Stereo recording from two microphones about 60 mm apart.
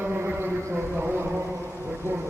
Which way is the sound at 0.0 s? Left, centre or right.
Right.